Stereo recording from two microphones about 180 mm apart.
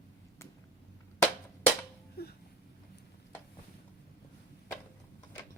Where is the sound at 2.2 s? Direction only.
60° left (ahead or behind).